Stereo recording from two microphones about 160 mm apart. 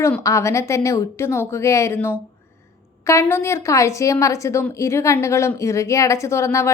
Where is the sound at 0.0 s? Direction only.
20° left (ahead or behind).